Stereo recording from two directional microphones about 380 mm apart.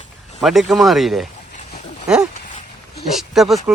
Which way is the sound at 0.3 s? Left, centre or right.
Centre.